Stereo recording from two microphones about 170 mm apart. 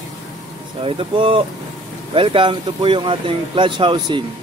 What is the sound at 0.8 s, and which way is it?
Speech, 30° right (ahead or behind).